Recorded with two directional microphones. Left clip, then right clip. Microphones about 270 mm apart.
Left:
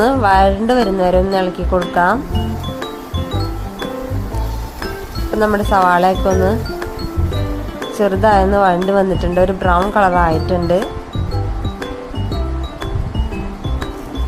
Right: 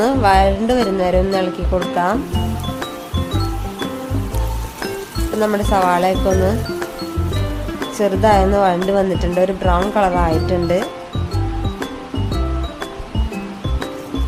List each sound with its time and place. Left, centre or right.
0.0 s speech: centre
5.4 s speech: centre